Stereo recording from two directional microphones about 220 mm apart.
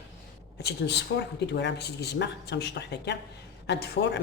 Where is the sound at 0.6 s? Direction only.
50° left (ahead or behind).